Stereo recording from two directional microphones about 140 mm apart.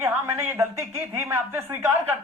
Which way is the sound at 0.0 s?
20° right (ahead or behind).